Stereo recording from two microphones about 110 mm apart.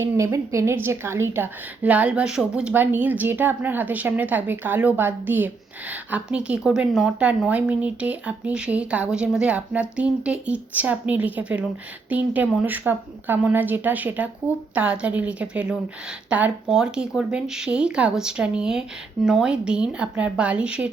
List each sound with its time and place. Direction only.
0.0 s a woman's voice: 25° right (ahead or behind); by 20.9 s 10° right (ahead or behind)